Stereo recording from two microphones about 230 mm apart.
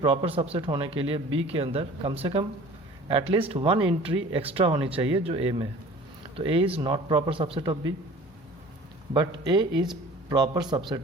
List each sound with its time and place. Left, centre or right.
0.0 s speech: right
9.1 s a man's voice: centre